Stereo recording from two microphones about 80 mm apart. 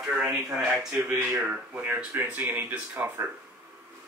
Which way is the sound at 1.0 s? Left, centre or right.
Right.